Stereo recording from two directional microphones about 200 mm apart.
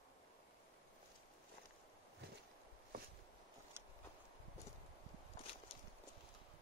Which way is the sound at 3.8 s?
10° right (ahead or behind).